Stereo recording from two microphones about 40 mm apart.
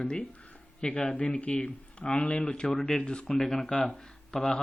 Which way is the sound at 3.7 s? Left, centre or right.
Left.